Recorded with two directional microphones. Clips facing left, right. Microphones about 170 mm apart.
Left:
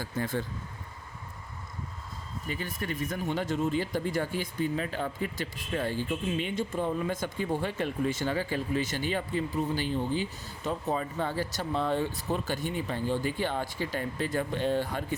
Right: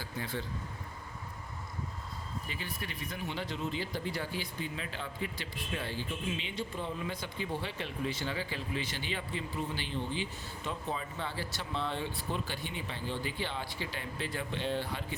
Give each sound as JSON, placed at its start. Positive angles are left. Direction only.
{"t": 0.0, "sound": "speech", "side_deg": 45}
{"t": 2.5, "sound": "speech", "side_deg": 45}